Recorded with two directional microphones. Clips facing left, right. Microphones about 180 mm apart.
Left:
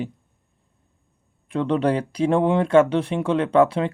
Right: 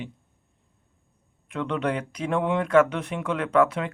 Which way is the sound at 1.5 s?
35° left (ahead or behind).